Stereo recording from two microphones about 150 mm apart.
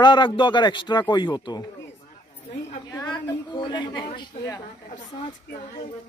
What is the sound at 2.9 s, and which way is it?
A woman's voice, 25° left (ahead or behind).